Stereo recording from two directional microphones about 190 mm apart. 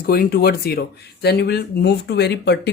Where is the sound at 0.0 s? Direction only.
50° left (ahead or behind).